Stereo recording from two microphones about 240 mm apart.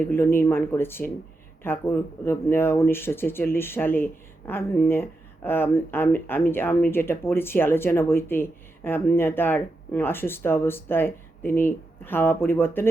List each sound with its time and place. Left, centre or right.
0.0 s speech: centre